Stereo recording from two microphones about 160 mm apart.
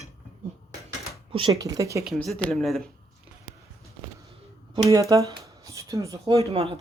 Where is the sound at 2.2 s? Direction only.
10° left (ahead or behind).